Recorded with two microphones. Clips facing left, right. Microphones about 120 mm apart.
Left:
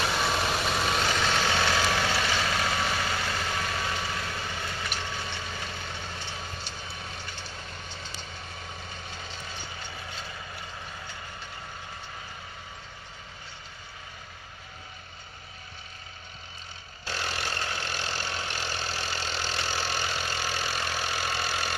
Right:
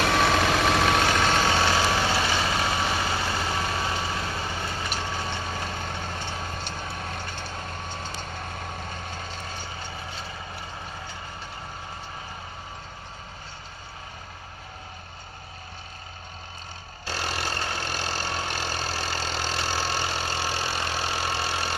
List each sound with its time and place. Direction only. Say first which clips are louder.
0.0 s vehicle: right 6 dB; 90° right; by 9.6 s 45° right (ahead or behind)
10.2 s vehicle: right 3 dB; 30° right (ahead or behind)
17.1 s vehicle: right 3 dB; 35° right (ahead or behind)